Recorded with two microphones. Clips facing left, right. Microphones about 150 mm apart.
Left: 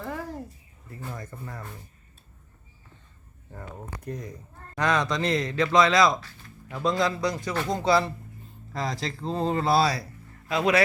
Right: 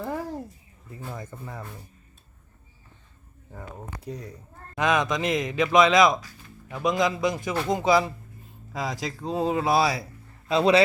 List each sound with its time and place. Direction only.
0.0 s a sound: 15° right (ahead or behind)
1.1 s speech: 10° right (ahead or behind)
3.5 s speech: 5° right (ahead or behind)
10.5 s speech: 30° right (ahead or behind)